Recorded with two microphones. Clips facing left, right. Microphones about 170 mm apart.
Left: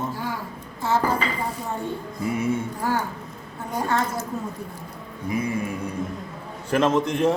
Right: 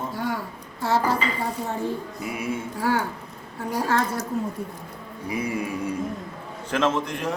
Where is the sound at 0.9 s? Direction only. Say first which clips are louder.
Even; 70° right (ahead or behind).